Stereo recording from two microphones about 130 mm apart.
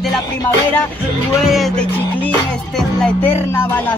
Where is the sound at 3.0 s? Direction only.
15° left (ahead or behind).